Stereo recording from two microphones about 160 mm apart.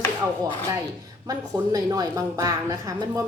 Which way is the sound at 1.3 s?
20° right (ahead or behind).